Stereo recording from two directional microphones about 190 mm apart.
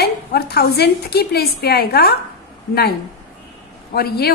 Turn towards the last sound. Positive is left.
turn(degrees=55)  # may be behind; listen again after turning